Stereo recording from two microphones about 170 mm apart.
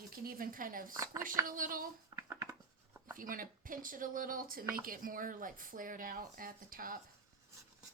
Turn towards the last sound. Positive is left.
turn(degrees=-55)  # may be behind; listen again after turning